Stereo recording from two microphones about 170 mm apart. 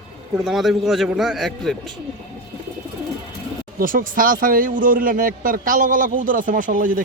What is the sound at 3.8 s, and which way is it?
A man's voice, 55° right (ahead or behind).